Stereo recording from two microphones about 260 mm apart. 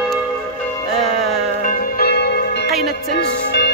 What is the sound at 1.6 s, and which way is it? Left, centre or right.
Church bell, left.